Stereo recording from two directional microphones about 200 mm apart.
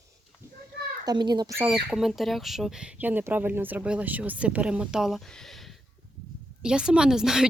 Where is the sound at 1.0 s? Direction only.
20° right (ahead or behind).